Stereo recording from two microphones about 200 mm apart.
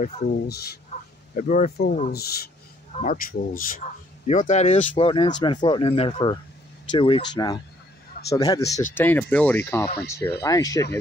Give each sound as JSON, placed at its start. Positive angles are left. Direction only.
{"t": 0.0, "sound": "speech", "side_deg": 50}
{"t": 1.3, "sound": "speech", "side_deg": 40}